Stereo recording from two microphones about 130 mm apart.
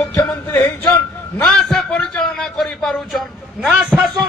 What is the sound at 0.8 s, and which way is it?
A man's voice, 10° left (ahead or behind).